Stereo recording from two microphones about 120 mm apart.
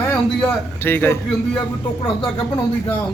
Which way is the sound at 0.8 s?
15° left (ahead or behind).